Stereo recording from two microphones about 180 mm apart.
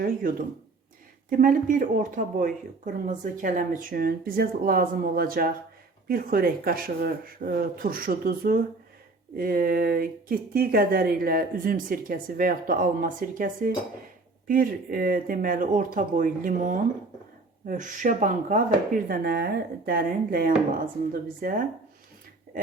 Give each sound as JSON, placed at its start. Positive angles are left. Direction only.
{"t": 0.0, "sound": "speech", "side_deg": -50}